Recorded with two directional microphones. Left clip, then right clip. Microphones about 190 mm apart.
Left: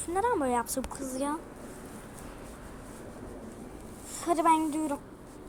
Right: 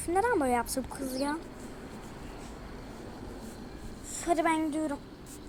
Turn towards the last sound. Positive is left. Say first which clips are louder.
# left 4 dB
turn(degrees=10)  # may be behind; listen again after turning